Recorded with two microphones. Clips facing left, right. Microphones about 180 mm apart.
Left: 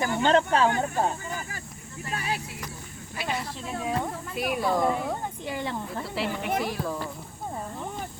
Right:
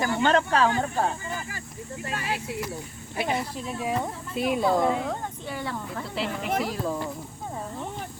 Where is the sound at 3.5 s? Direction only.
10° right (ahead or behind).